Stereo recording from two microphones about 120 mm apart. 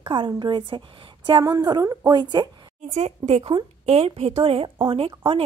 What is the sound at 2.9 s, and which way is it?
A woman's voice, 65° right (ahead or behind).